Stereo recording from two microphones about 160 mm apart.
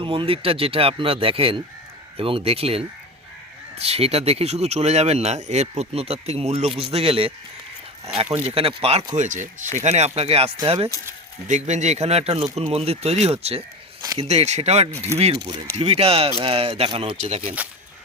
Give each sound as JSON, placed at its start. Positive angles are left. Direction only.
{"t": 0.0, "sound": "speech", "side_deg": -35}
{"t": 15.7, "sound": "speech", "side_deg": -40}